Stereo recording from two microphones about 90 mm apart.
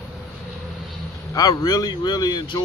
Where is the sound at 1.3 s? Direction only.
40° left (ahead or behind).